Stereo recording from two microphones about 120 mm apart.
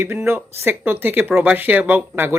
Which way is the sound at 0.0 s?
20° right (ahead or behind).